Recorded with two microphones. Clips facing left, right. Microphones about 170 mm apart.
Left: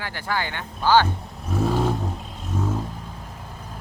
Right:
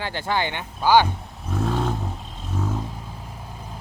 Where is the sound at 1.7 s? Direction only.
5° left (ahead or behind).